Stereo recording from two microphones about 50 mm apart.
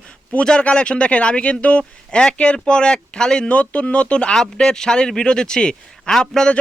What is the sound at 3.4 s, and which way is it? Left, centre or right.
Speech, left.